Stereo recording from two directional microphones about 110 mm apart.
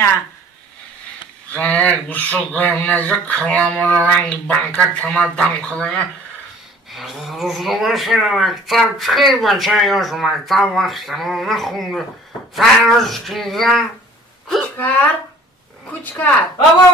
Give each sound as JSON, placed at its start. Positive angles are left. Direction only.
{"t": 1.5, "sound": "speech", "side_deg": 10}
{"t": 6.9, "sound": "speech", "side_deg": 0}
{"t": 14.8, "sound": "speech", "side_deg": 15}